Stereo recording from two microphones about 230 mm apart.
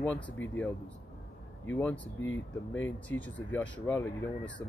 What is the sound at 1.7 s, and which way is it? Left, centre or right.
Speech, centre.